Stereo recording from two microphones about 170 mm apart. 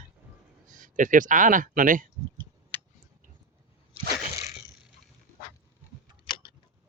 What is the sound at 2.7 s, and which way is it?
Tick, 10° left (ahead or behind).